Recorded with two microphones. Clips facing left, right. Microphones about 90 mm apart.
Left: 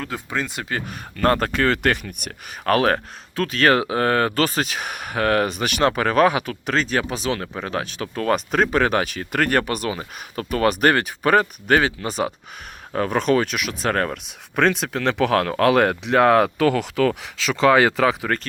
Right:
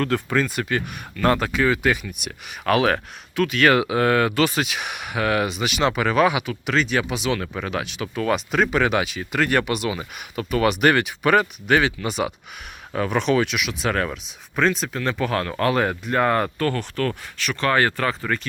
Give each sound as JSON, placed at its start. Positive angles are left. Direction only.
{"t": 0.0, "sound": "speech", "side_deg": 15}
{"t": 0.7, "sound": "speech", "side_deg": 40}
{"t": 1.6, "sound": "speech", "side_deg": 65}